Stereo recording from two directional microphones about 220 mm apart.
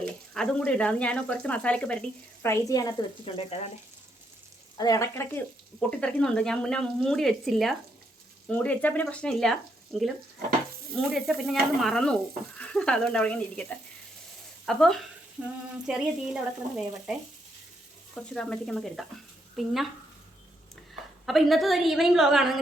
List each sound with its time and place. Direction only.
0.3 s speech: 5° left (ahead or behind); by 3.7 s 25° left (ahead or behind)
4.8 s frying: 15° left (ahead or behind)
6.0 s speech: 5° left (ahead or behind)
21.2 s speech: centre (ahead or behind)